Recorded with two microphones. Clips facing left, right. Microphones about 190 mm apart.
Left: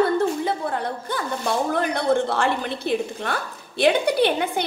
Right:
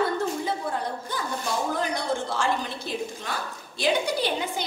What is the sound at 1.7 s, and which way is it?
A woman's voice, 60° left (ahead or behind).